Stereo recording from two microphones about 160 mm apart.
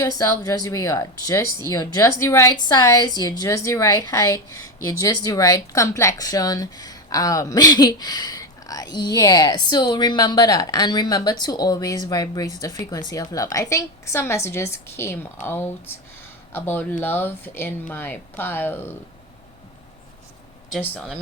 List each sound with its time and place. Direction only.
0.0 s a woman's voice: 20° left (ahead or behind)
20.8 s a woman's voice: 10° left (ahead or behind)